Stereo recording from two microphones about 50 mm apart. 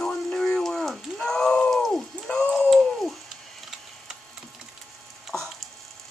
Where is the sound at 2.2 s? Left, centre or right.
Centre.